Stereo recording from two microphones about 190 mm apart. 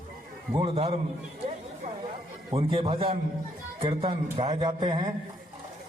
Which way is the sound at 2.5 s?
25° right (ahead or behind).